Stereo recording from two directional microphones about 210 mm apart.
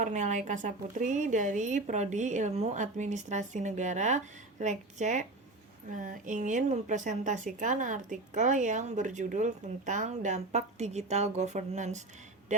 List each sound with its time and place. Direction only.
0.0 s a woman's voice: 35° right (ahead or behind)